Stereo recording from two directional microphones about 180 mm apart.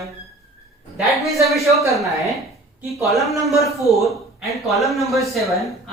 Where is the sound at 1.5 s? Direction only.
Centre (ahead or behind).